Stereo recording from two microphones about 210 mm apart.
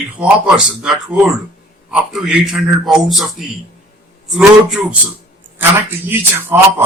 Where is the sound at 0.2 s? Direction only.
5° right (ahead or behind).